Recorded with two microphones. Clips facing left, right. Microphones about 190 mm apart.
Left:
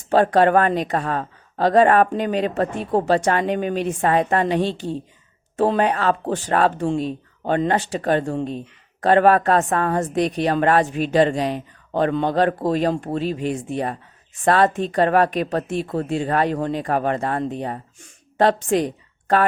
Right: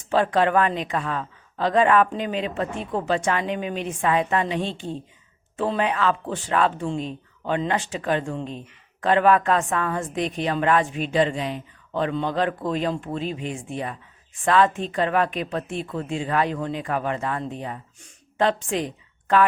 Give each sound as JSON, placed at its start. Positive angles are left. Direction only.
{"t": 0.1, "sound": "a woman's voice", "side_deg": 40}
{"t": 5.5, "sound": "a woman's voice", "side_deg": 50}